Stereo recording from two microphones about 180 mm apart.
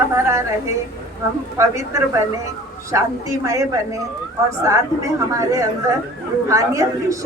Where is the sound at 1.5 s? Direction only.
15° right (ahead or behind).